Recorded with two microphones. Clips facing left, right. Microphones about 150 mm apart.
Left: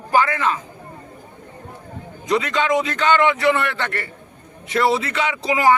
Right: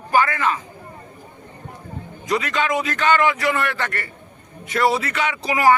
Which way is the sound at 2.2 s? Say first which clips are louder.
Left 2 dB; 25° left (ahead or behind).